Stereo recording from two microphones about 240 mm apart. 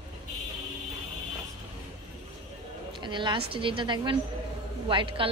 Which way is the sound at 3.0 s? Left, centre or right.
Centre.